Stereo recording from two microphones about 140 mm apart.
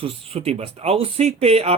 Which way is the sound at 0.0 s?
40° right (ahead or behind).